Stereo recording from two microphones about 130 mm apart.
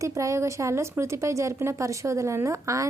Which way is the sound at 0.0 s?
25° right (ahead or behind).